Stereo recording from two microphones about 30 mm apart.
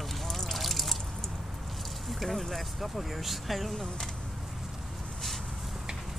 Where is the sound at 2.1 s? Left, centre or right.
Centre.